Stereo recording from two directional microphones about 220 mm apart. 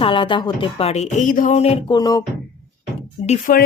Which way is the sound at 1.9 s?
15° left (ahead or behind).